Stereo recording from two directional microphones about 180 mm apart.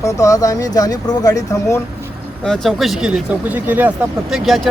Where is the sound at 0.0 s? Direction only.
15° left (ahead or behind).